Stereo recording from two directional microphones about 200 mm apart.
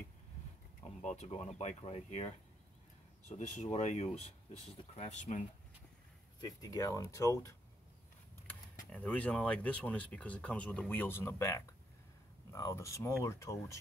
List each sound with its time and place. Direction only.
1.0 s speech: 35° left (ahead or behind)
6.4 s speech: 20° left (ahead or behind)
8.9 s speech: 10° left (ahead or behind)